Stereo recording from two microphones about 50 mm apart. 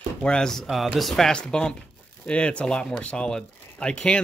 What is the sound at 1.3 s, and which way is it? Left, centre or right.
Speech, centre.